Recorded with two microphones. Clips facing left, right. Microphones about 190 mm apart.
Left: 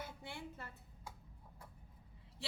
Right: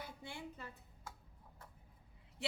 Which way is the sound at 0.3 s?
15° right (ahead or behind).